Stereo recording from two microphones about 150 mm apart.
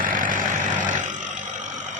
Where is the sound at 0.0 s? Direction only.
65° right (ahead or behind).